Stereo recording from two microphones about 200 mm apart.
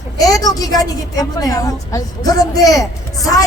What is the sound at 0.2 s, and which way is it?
Speech, 15° left (ahead or behind).